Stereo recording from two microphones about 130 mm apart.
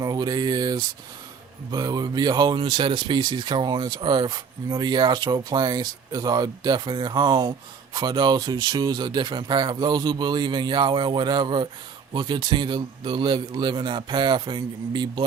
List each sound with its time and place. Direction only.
0.0 s speech: 30° right (ahead or behind)